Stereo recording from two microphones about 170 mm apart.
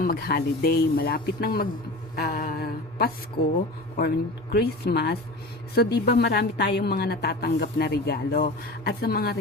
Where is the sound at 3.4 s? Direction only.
70° left (ahead or behind).